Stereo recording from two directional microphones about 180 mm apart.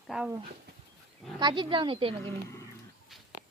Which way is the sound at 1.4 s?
25° right (ahead or behind).